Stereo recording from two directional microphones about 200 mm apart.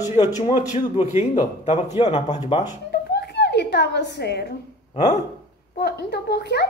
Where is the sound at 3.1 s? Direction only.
55° left (ahead or behind).